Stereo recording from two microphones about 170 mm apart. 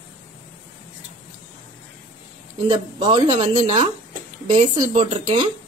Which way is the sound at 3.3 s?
40° right (ahead or behind).